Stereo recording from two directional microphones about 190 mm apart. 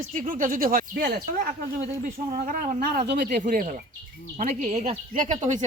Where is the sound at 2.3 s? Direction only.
45° right (ahead or behind).